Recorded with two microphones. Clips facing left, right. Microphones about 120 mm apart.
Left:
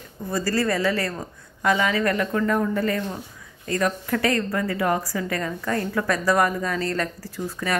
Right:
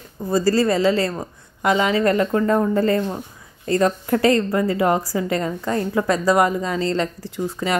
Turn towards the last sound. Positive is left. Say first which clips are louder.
# right 4 dB
turn(degrees=-20)  # may be behind; listen again after turning